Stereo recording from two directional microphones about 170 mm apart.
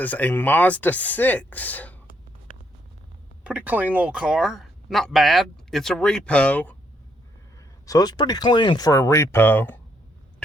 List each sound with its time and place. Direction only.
0.0 s speech: 10° left (ahead or behind)
3.4 s speech: 10° right (ahead or behind); by 6.7 s 10° left (ahead or behind)
7.9 s speech: 20° left (ahead or behind)